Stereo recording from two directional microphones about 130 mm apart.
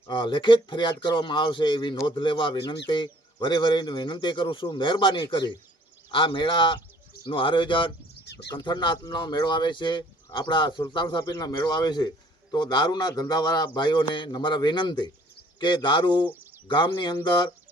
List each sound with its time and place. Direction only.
0.1 s speech: 40° left (ahead or behind)